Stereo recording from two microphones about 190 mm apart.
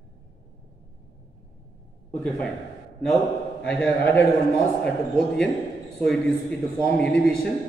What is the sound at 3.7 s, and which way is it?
A man's voice, 10° left (ahead or behind).